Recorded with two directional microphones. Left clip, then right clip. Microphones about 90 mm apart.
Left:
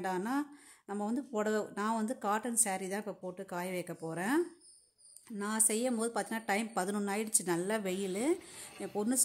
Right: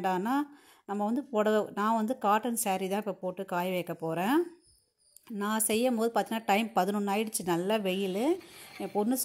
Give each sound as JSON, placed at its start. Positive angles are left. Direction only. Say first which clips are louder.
{"t": 0.0, "sound": "speech", "louder": "right 6 dB", "side_deg": -35}
{"t": 5.4, "sound": "a woman's voice", "louder": "right 5 dB", "side_deg": -40}